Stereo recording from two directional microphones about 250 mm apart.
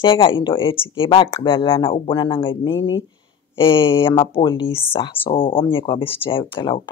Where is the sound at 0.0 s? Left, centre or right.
Centre.